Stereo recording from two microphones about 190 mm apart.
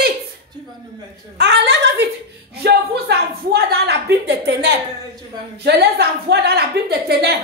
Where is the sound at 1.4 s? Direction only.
65° right (ahead or behind).